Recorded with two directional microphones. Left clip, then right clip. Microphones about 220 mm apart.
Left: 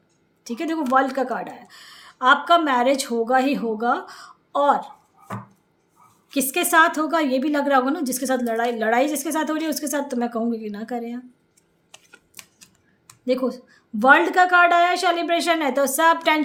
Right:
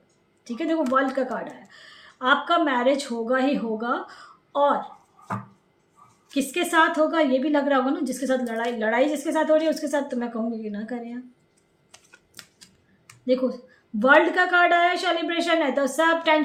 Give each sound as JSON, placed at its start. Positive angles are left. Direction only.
{"t": 0.4, "sound": "a woman's voice", "side_deg": 45}
{"t": 6.3, "sound": "a woman's voice", "side_deg": 45}
{"t": 11.9, "sound": "typing", "side_deg": 5}
{"t": 13.2, "sound": "a woman's voice", "side_deg": 45}